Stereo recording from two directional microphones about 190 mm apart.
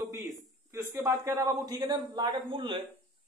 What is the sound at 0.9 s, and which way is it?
Speech, 15° right (ahead or behind).